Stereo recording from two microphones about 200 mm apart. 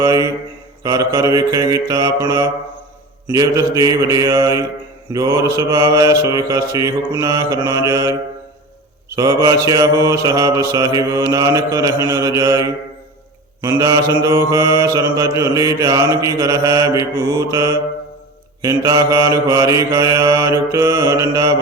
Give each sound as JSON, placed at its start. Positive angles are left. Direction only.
{"t": 0.0, "sound": "mantra", "side_deg": -15}
{"t": 9.1, "sound": "mantra", "side_deg": -15}